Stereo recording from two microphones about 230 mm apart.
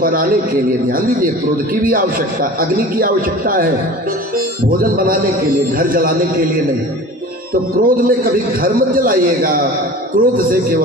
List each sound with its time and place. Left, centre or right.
0.0 s a man's voice: right
4.6 s a man's voice: right
7.8 s a man's voice: right